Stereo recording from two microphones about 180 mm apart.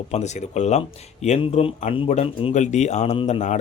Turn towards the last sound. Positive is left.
turn(degrees=40)  # may be behind; listen again after turning